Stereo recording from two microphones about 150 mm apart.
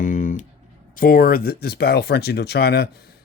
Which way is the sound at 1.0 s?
75° left (ahead or behind).